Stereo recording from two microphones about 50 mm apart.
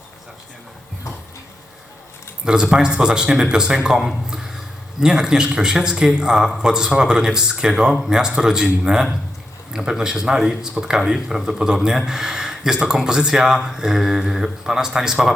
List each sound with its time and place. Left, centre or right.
2.4 s speech: centre
4.3 s a sound: centre
4.9 s speech: centre